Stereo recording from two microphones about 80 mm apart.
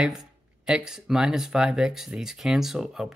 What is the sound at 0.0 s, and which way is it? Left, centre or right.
Speech, centre.